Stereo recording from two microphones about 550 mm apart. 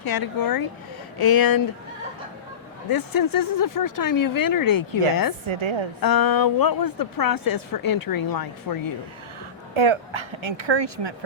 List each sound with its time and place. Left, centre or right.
0.0 s a woman's voice: left
2.9 s a woman's voice: left
5.5 s a woman's voice: right
6.0 s a woman's voice: left
9.7 s speech: right